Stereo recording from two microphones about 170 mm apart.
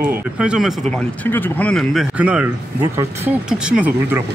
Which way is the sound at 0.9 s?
10° left (ahead or behind).